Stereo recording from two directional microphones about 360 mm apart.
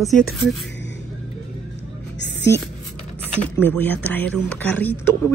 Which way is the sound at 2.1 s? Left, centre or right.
Left.